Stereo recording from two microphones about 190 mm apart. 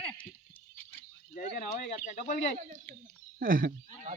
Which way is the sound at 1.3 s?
40° left (ahead or behind).